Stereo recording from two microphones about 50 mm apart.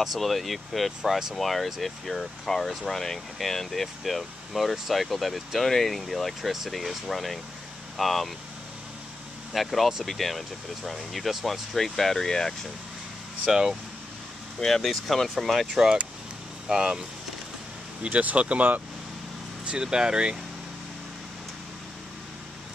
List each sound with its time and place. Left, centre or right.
0.0 s speech: centre
9.5 s speech: centre
13.5 s speech: centre
14.8 s speech: centre
15.8 s speech: centre
18.0 s speech: right
19.8 s speech: centre